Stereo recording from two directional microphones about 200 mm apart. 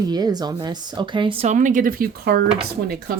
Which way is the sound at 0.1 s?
20° right (ahead or behind).